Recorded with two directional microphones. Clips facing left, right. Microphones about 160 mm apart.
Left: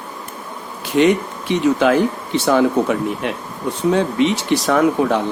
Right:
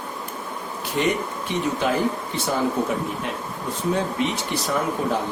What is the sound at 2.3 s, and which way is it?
Speech, 80° left.